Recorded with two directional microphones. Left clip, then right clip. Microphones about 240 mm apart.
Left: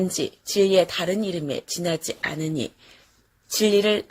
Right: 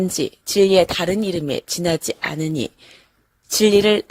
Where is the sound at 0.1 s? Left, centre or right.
Right.